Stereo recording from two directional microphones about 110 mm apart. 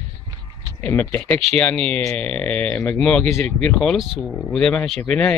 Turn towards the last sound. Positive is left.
turn(degrees=10)  # may be behind; listen again after turning